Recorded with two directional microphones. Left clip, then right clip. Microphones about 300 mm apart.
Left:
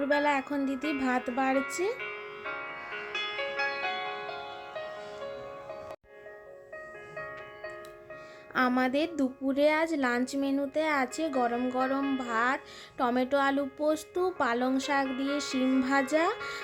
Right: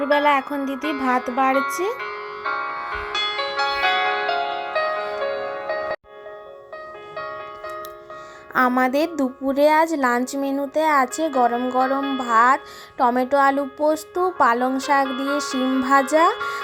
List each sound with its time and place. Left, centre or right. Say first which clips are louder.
0.1 s speech: right 10 dB; centre
0.8 s music: right 12 dB; centre
7.2 s music: right 10 dB; centre
8.5 s a woman's voice: right 9 dB; centre
11.9 s music: right 7 dB; right
12.2 s a woman's voice: right 17 dB; centre
15.0 s music: right 9 dB; right
15.8 s a woman's voice: right 13 dB; centre